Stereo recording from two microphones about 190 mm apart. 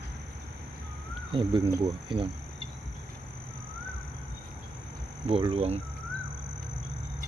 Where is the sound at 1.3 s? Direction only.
25° right (ahead or behind).